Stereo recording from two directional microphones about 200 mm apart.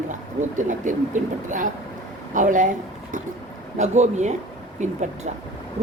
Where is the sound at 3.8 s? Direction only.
35° right (ahead or behind).